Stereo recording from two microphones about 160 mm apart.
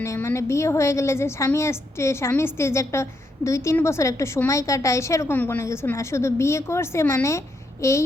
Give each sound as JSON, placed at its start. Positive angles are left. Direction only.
{"t": 0.0, "sound": "a woman's voice", "side_deg": 15}